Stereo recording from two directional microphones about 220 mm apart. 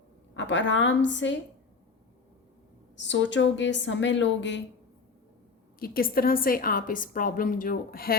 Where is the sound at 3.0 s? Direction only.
55° left (ahead or behind).